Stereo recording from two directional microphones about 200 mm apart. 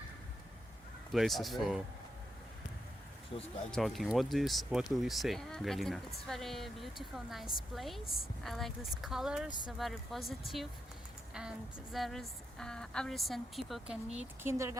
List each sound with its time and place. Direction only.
1.1 s speech: centre (ahead or behind)
3.3 s speech: 30° left (ahead or behind)
3.7 s speech: centre (ahead or behind)
14.4 s speech: 15° right (ahead or behind)